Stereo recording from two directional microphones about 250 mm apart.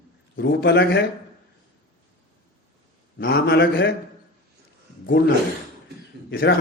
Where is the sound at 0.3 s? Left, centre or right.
Left.